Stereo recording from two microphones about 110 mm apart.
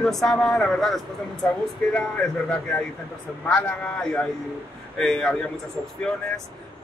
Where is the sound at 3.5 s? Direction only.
15° left (ahead or behind).